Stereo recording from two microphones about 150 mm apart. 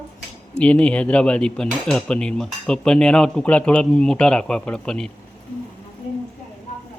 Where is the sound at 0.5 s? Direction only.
5° left (ahead or behind).